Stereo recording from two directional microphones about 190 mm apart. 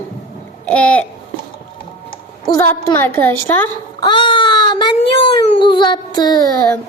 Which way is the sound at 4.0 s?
25° left (ahead or behind).